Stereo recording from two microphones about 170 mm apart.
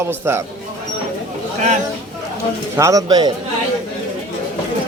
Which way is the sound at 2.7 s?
20° right (ahead or behind).